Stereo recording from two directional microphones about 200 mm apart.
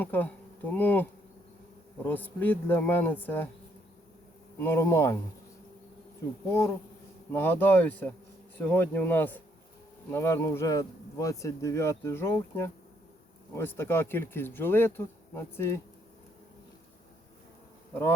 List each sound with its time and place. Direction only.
0.0 s speech: 10° left (ahead or behind)
2.0 s speech: 10° left (ahead or behind)
4.6 s speech: 10° left (ahead or behind)
7.3 s speech: 10° left (ahead or behind)